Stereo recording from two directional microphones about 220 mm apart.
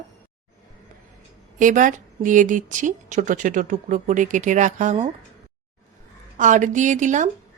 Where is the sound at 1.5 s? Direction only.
35° right (ahead or behind).